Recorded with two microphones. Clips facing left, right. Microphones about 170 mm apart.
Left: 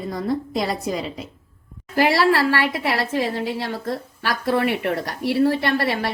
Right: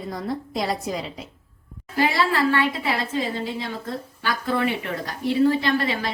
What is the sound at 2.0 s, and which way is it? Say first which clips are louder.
A woman's voice: left 4 dB; 80° left.